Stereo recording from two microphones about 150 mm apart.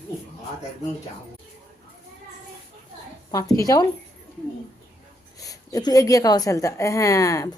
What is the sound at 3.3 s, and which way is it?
Speech, 25° left (ahead or behind).